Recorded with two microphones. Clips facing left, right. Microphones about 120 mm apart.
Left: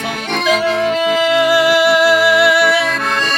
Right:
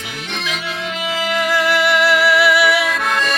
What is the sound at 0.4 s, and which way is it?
Music, 45° left (ahead or behind).